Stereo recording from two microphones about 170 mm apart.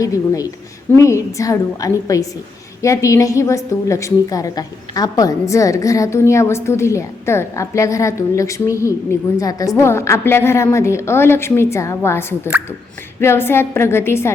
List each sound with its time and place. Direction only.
0.0 s a woman's voice: 20° left (ahead or behind)